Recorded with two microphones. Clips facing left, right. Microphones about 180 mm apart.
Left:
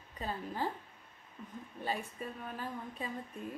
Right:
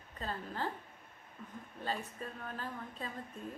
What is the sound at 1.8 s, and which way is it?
A woman's voice, 10° left (ahead or behind).